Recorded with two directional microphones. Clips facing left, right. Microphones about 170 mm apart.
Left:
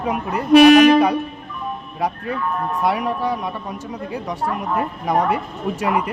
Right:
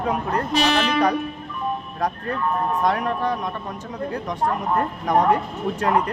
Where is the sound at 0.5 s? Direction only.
60° left (ahead or behind).